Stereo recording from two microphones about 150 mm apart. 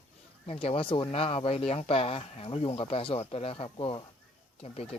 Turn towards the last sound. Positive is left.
turn(degrees=40)  # may be behind; listen again after turning